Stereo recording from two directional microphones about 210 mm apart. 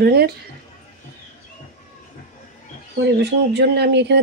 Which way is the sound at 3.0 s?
55° right (ahead or behind).